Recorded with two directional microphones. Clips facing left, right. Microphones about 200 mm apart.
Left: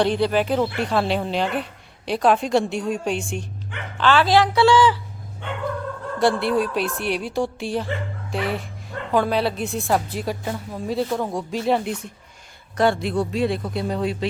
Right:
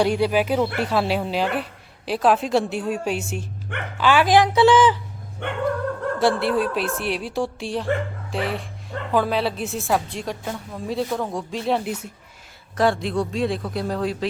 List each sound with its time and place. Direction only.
0.0 s a woman's voice: 10° right (ahead or behind)
5.4 s dog: 65° right (ahead or behind)
6.1 s a woman's voice: centre (ahead or behind)